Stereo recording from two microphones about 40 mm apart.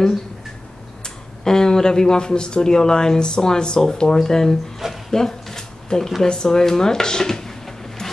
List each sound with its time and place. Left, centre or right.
1.0 s speech: centre
5.1 s a sound: centre
5.9 s speech: centre